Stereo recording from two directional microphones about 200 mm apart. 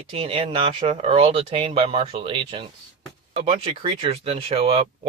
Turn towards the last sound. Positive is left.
turn(degrees=-30)  # may be behind; listen again after turning